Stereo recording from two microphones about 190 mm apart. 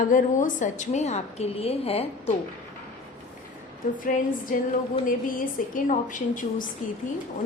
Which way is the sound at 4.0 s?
45° left (ahead or behind).